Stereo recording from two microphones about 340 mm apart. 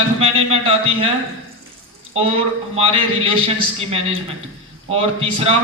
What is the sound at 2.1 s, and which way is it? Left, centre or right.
A man's voice, centre.